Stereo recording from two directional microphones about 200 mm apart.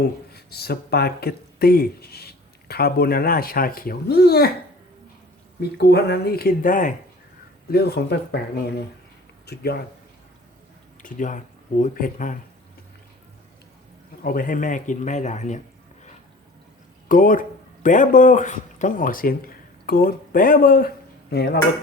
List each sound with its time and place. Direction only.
0.3 s speech: 50° left (ahead or behind)
5.7 s speech: 55° left (ahead or behind)
7.7 s speech: 55° left (ahead or behind)
11.0 s speech: 40° left (ahead or behind)
14.3 s speech: 45° left (ahead or behind)
17.1 s speech: 45° left (ahead or behind)